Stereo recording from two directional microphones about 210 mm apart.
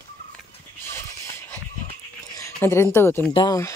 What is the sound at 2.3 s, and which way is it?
Speech, 15° left (ahead or behind).